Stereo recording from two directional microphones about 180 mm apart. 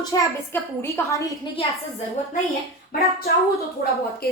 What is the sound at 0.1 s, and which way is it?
A woman's voice, 20° left (ahead or behind).